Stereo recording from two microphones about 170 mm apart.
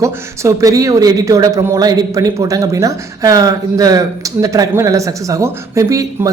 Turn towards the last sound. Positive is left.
turn(degrees=-20)  # may be behind; listen again after turning